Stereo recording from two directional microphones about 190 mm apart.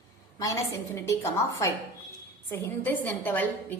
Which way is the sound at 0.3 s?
15° left (ahead or behind).